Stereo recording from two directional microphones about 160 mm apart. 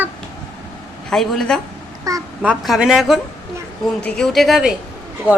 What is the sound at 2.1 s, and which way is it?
Speech, 20° right (ahead or behind).